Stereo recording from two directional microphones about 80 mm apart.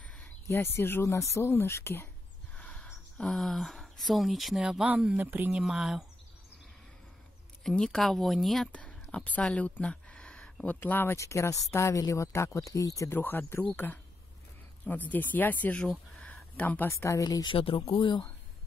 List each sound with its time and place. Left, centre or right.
0.0 s a sound: centre
0.5 s speech: left
2.5 s a sound: centre
4.6 s speech: centre
5.6 s speech: centre
7.6 s speech: centre
9.1 s speech: centre
11.1 s speech: left
13.1 s speech: left
16.8 s speech: left
17.2 s speech: left
17.5 s speech: left